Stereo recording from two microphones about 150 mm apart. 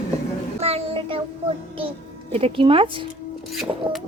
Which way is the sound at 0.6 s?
40° right (ahead or behind).